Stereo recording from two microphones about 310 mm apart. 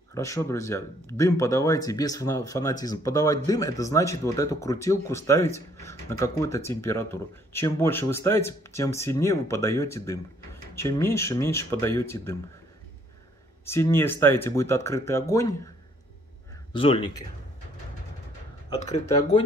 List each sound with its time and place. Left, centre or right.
0.1 s speech: centre
13.7 s speech: centre
16.7 s speech: centre
18.7 s speech: left